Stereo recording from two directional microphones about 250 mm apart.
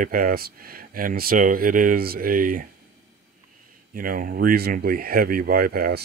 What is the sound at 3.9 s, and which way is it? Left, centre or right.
Speech, right.